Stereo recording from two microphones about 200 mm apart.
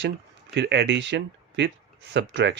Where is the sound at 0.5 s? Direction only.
60° right (ahead or behind).